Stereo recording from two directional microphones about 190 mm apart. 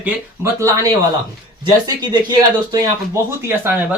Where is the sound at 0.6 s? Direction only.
15° right (ahead or behind).